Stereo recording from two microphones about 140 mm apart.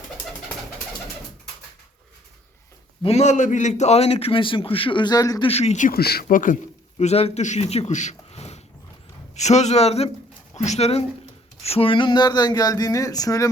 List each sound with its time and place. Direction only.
3.0 s a man's voice: 50° left (ahead or behind); by 5.5 s 25° left (ahead or behind)
5.5 s speech: 50° left (ahead or behind); by 6.6 s 70° left (ahead or behind)
7.0 s a man's voice: 45° left (ahead or behind); by 13.5 s 25° left (ahead or behind)